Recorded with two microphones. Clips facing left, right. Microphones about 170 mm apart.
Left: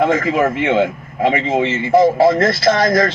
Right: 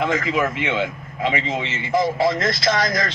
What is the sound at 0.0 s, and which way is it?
Speech, 35° left (ahead or behind).